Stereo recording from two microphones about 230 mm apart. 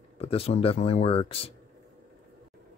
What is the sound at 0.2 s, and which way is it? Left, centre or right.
Speech, left.